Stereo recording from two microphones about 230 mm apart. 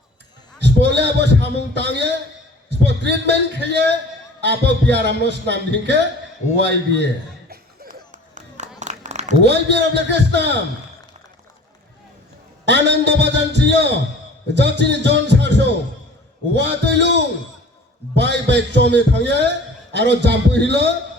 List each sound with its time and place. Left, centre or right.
0.6 s a man's voice: right
7.5 s a sound: right
9.4 s a man's voice: right
12.6 s a man's voice: right